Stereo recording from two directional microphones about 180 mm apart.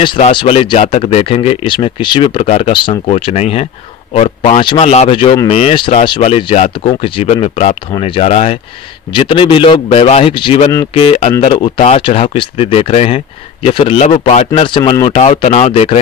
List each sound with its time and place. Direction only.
0.0 s speech: 25° left (ahead or behind)
14.5 s speech: 25° left (ahead or behind)
15.0 s speech: 40° left (ahead or behind)